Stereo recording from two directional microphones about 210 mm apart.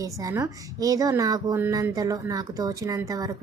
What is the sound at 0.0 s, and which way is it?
Speech, 15° right (ahead or behind).